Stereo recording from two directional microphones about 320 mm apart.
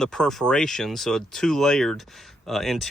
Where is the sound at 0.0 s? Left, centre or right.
Centre.